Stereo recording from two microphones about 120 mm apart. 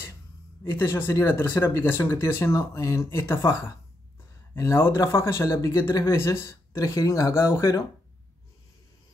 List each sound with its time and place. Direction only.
0.7 s speech: 20° left (ahead or behind)